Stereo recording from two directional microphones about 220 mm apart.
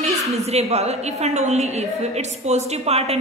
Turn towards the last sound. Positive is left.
turn(degrees=-30)  # may be behind; listen again after turning